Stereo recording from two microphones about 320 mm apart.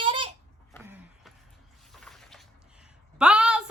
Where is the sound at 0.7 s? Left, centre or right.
Centre.